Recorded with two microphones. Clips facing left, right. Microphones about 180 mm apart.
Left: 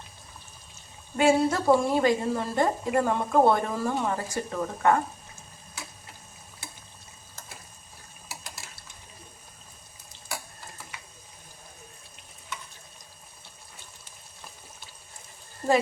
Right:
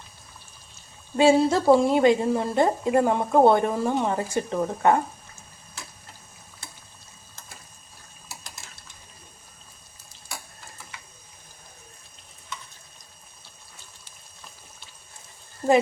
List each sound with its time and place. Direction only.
1.1 s a woman's voice: 25° right (ahead or behind)